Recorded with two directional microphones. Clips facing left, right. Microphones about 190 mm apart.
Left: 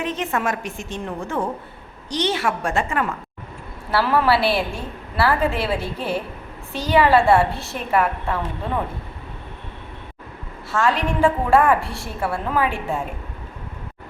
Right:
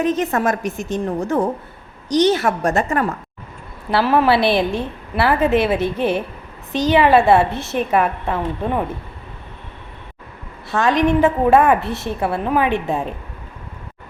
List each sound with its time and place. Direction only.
0.0 s a woman's voice: 40° right (ahead or behind)
3.8 s a woman's voice: 20° right (ahead or behind)
10.7 s a woman's voice: 20° right (ahead or behind)